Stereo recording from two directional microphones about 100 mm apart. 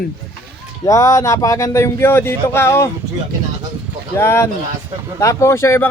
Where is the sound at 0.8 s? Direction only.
30° left (ahead or behind).